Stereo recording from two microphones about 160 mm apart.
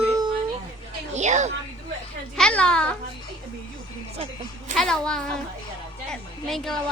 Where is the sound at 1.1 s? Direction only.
45° right (ahead or behind).